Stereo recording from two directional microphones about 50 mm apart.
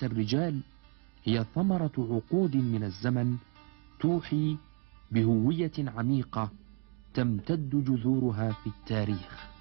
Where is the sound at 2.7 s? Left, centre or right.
Left.